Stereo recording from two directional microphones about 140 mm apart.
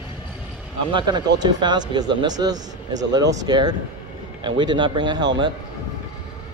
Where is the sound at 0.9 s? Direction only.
30° right (ahead or behind).